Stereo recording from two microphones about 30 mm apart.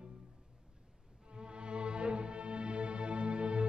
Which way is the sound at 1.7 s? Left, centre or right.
Right.